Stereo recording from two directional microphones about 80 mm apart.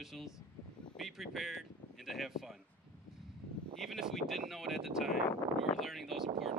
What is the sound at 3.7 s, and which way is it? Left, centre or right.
Speech, centre.